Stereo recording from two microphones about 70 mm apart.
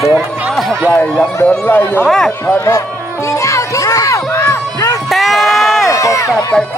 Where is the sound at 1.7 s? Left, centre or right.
Left.